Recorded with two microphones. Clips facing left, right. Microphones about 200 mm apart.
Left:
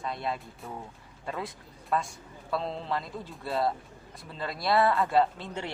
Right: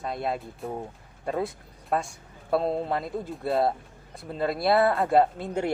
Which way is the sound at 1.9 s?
55° right (ahead or behind).